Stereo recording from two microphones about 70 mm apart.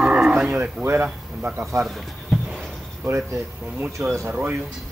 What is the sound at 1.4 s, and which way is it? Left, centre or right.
Speech, right.